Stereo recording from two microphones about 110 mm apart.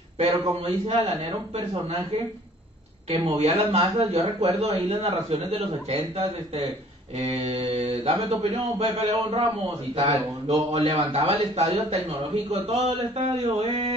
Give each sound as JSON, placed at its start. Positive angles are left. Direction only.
{"t": 0.2, "sound": "a man's voice", "side_deg": -65}
{"t": 3.1, "sound": "a man's voice", "side_deg": -65}
{"t": 3.9, "sound": "a man's voice", "side_deg": -35}
{"t": 4.2, "sound": "a man's voice", "side_deg": -70}
{"t": 11.0, "sound": "a man's voice", "side_deg": -55}